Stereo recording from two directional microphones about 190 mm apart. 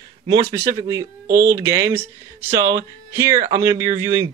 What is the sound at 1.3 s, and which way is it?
Speech, 50° right (ahead or behind).